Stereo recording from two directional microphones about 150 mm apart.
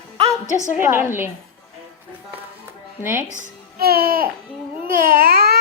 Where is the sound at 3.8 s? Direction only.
90° right.